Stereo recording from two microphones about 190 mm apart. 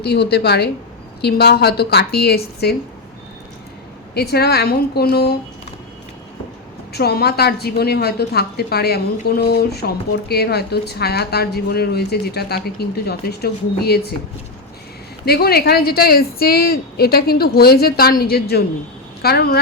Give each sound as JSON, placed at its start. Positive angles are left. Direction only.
{"t": 0.0, "sound": "speech", "side_deg": 60}
{"t": 4.1, "sound": "speech", "side_deg": 55}
{"t": 6.9, "sound": "speech", "side_deg": 55}
{"t": 15.2, "sound": "speech", "side_deg": 55}